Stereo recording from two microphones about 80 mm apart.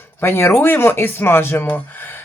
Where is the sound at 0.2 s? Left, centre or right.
Left.